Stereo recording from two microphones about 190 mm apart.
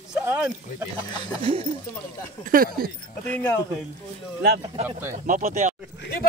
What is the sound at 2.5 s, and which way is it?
Speech, 50° right (ahead or behind).